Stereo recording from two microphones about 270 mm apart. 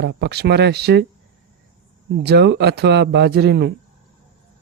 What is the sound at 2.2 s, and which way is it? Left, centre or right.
Speech, right.